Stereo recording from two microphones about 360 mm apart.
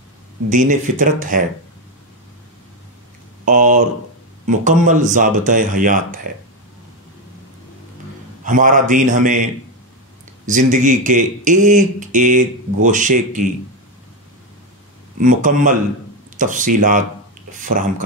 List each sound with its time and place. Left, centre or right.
0.5 s speech: right
3.4 s speech: right
8.5 s speech: right
15.1 s speech: right